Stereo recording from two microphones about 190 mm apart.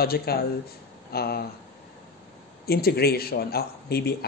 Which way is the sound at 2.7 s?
55° left (ahead or behind).